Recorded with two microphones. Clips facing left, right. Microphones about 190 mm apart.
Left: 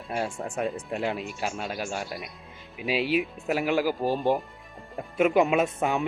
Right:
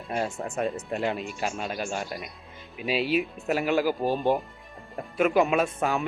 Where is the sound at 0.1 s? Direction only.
10° left (ahead or behind).